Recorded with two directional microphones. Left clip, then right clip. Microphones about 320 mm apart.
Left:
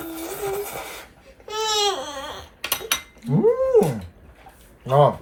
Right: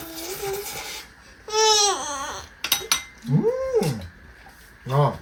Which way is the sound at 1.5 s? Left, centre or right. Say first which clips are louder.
Right 3 dB; centre.